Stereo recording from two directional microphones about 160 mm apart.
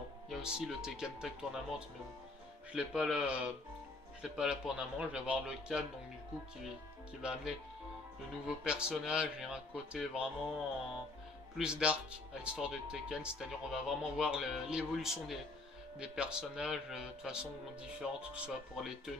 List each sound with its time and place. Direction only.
0.3 s speech: 5° right (ahead or behind)
7.2 s speech: 5° right (ahead or behind)
11.5 s speech: 5° right (ahead or behind)